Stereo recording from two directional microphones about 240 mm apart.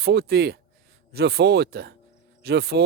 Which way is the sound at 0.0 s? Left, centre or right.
Right.